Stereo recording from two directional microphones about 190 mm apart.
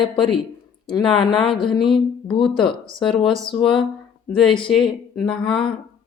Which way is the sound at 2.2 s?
25° left (ahead or behind).